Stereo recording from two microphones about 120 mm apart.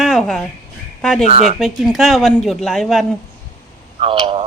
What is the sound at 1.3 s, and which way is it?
Speech, 75° right (ahead or behind).